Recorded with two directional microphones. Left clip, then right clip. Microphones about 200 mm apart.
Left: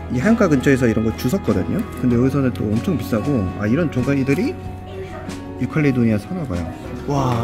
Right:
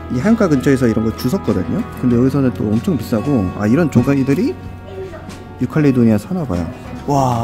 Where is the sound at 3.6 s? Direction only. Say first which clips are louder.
Right 7 dB; 30° right (ahead or behind).